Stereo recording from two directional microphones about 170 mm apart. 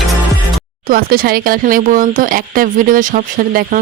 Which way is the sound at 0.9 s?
60° right (ahead or behind).